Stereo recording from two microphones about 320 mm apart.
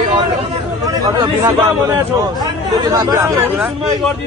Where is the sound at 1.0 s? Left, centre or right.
Centre.